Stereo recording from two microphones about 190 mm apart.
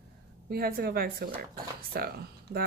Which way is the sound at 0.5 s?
55° right (ahead or behind).